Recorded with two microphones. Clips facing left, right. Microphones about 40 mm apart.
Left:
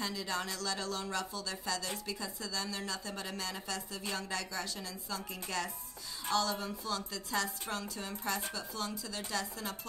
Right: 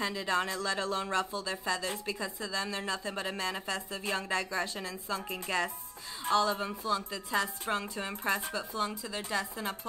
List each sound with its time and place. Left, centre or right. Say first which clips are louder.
0.0 s speech: right 6 dB; right